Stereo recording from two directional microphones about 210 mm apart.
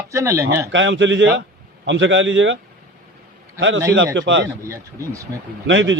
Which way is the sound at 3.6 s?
60° right (ahead or behind).